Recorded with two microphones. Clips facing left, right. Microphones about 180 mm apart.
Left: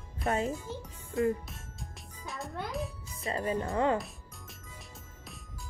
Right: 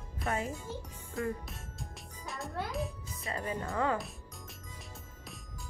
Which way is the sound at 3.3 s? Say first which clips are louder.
Left 5 dB; 25° left (ahead or behind).